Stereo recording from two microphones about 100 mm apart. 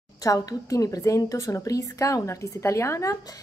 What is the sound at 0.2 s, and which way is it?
Speech, 35° left (ahead or behind).